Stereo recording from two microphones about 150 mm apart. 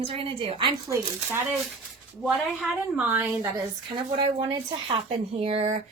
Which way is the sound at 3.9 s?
30° right (ahead or behind).